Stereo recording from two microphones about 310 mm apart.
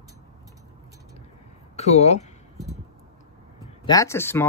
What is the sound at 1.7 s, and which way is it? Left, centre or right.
Speech, centre.